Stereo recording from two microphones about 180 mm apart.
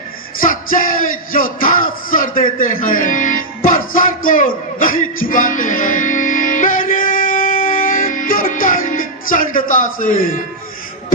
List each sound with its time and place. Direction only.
0.4 s music: 50° left (ahead or behind)
1.5 s speech: 50° left (ahead or behind)